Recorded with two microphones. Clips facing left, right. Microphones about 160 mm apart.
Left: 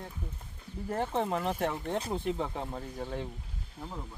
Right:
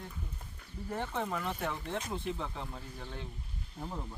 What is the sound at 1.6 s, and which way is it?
Speech, 45° left (ahead or behind).